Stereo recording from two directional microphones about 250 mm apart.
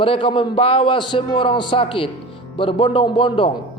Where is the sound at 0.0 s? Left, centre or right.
Left.